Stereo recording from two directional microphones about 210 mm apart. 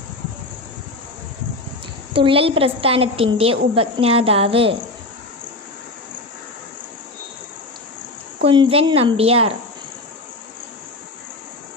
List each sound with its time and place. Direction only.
2.1 s a woman's voice: 25° right (ahead or behind)
8.4 s a woman's voice: 25° right (ahead or behind)